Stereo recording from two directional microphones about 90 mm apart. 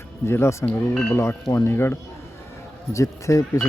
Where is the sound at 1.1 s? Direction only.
25° left (ahead or behind).